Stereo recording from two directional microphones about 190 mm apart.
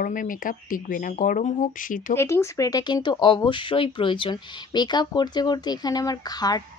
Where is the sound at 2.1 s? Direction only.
15° left (ahead or behind).